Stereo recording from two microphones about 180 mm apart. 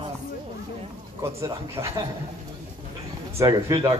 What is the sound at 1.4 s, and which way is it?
Speech, 15° right (ahead or behind).